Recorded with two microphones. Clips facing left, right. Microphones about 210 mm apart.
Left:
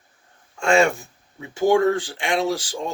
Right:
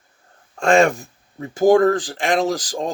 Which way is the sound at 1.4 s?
40° right (ahead or behind).